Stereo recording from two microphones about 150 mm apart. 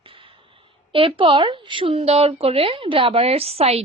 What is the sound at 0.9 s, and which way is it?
A woman's voice, 35° right (ahead or behind).